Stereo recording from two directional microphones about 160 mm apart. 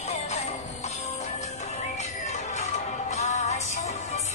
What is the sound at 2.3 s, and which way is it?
Music, 45° left (ahead or behind).